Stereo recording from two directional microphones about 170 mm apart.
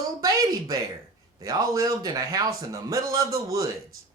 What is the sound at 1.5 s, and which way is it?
Speech, 20° right (ahead or behind).